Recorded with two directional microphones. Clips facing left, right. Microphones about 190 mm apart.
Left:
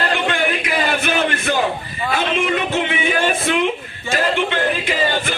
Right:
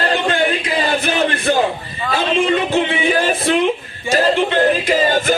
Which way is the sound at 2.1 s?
30° right (ahead or behind).